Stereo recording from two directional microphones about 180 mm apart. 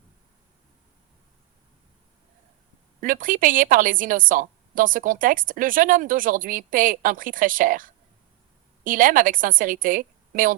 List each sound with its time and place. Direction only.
3.0 s a woman's voice: 50° right (ahead or behind)